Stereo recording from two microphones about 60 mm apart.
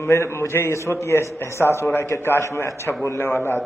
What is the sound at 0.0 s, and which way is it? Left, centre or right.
A man's voice, left.